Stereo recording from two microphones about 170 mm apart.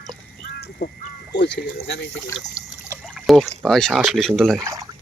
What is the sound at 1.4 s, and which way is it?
Speech, 90° left.